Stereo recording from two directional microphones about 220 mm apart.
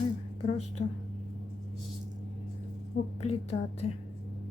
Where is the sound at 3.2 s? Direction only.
30° left (ahead or behind).